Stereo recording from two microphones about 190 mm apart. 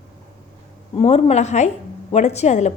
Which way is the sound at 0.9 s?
35° left (ahead or behind).